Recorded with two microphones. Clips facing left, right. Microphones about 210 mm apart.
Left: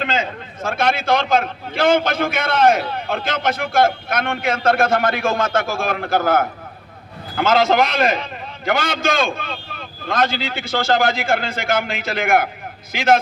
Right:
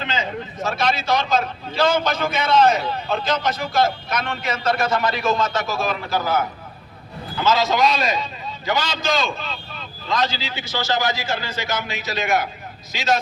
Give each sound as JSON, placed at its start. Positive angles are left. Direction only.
{"t": 0.0, "sound": "speech", "side_deg": 55}